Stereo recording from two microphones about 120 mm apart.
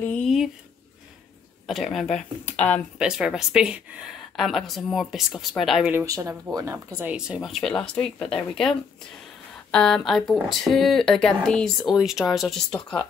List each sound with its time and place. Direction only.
0.0 s speech: 10° left (ahead or behind)
1.7 s speech: centre (ahead or behind)
3.0 s speech: 5° right (ahead or behind)
6.0 s speech: 25° right (ahead or behind)
7.1 s speech: 5° right (ahead or behind)